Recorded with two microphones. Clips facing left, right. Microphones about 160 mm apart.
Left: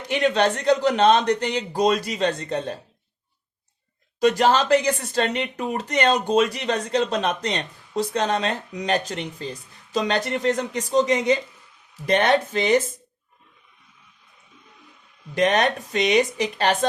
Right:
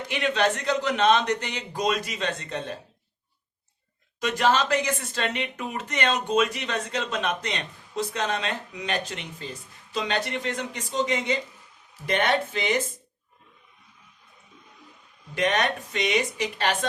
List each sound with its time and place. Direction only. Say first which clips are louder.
0.1 s speech: left 5 dB; 35° left (ahead or behind)
4.2 s speech: left 5 dB; 35° left (ahead or behind)
15.4 s speech: left 5 dB; 35° left (ahead or behind)